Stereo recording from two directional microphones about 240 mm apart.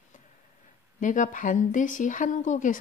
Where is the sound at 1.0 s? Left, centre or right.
Left.